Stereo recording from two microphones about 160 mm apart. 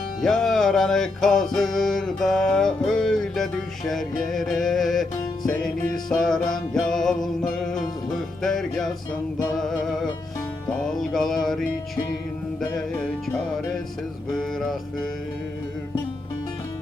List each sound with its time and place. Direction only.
0.2 s music: centre (ahead or behind)
13.2 s music: centre (ahead or behind)